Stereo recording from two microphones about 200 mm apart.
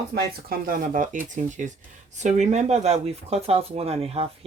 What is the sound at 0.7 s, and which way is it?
Speech, 45° right (ahead or behind).